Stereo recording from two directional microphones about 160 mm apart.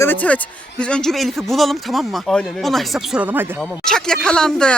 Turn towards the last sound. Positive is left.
turn(degrees=5)  # may be behind; listen again after turning